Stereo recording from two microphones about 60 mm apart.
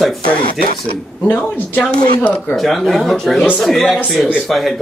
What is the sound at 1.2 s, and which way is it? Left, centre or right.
Speech, left.